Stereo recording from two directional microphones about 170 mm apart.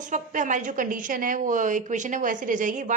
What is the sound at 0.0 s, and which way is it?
A woman's voice, 50° right (ahead or behind).